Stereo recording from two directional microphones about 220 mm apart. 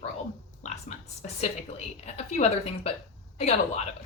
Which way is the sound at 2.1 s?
30° left (ahead or behind).